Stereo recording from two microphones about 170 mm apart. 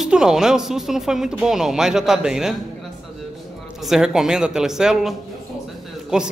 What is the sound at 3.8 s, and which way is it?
Speech, 5° right (ahead or behind).